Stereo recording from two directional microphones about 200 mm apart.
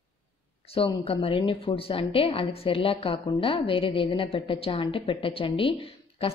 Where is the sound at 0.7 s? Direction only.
30° left (ahead or behind).